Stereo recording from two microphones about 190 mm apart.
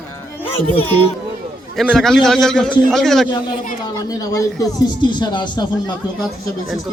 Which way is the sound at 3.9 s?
20° left (ahead or behind).